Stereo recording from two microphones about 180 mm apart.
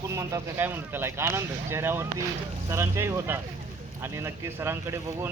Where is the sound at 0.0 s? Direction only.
15° right (ahead or behind).